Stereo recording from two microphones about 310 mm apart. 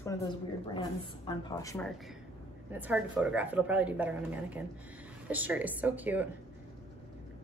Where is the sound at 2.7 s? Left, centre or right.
Centre.